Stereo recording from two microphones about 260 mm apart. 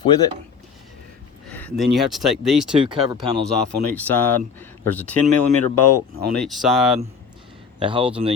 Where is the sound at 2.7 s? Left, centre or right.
Centre.